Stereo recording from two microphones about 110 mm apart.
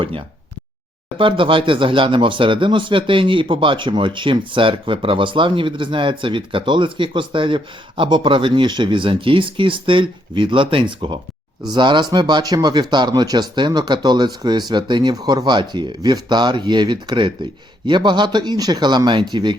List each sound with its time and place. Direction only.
0.0 s speech: 55° right (ahead or behind)